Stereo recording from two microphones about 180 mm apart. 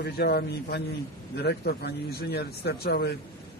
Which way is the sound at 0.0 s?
60° left (ahead or behind).